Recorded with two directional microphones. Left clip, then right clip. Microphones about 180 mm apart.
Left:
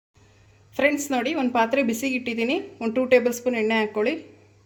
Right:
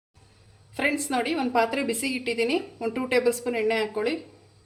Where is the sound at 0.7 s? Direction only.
35° left (ahead or behind).